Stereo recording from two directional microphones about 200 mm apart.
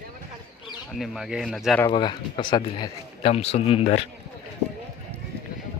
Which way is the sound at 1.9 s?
25° left (ahead or behind).